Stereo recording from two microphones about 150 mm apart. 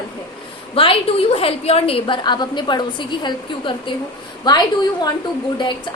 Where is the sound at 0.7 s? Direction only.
40° left (ahead or behind).